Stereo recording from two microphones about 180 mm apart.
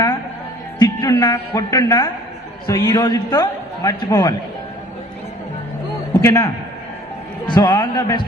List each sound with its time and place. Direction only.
0.8 s a man's voice: 20° left (ahead or behind)
6.2 s a man's voice: 20° left (ahead or behind)